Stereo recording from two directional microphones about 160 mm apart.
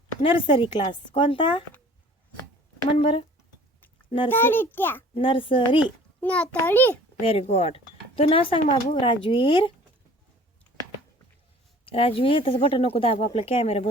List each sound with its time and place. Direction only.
0.2 s speech: 35° left (ahead or behind)
2.9 s speech: 35° left (ahead or behind)
4.3 s a child's voice: 10° left (ahead or behind)
5.1 s speech: 35° left (ahead or behind)
6.1 s a child's voice: 10° left (ahead or behind)
7.2 s speech: 40° left (ahead or behind)
11.9 s speech: 35° left (ahead or behind)